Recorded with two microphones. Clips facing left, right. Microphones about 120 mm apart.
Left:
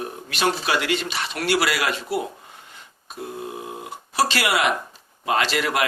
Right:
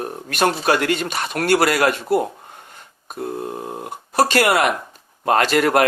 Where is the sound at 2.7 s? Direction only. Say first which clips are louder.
Right 4 dB; 50° right (ahead or behind).